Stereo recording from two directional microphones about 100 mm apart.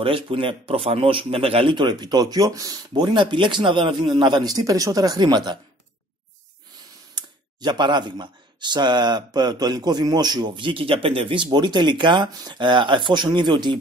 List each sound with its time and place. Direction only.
0.0 s speech: 60° right (ahead or behind)
7.2 s speech: 45° right (ahead or behind)